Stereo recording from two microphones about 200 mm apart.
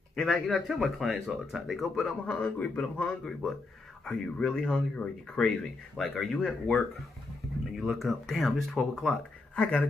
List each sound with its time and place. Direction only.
0.1 s speech: centre (ahead or behind)